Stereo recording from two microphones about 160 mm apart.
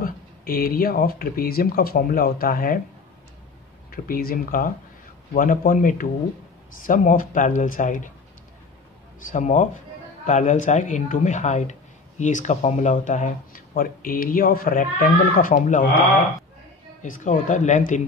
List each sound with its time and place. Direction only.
0.0 s speech: 65° left (ahead or behind)
3.9 s speech: 65° left (ahead or behind)
9.3 s speech: 50° left (ahead or behind)